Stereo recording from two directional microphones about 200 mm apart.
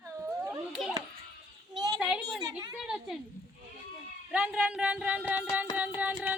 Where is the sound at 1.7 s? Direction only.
20° right (ahead or behind).